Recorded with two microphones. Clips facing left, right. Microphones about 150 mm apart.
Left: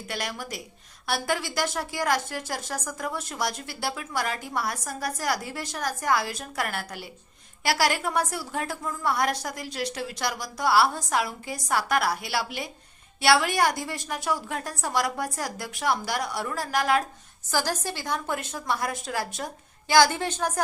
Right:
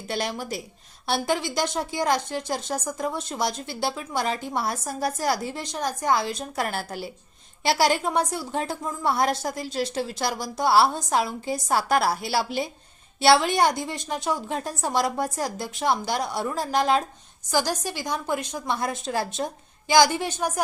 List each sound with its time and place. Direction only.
0.1 s a woman's voice: 30° right (ahead or behind)
19.9 s a woman's voice: 15° right (ahead or behind)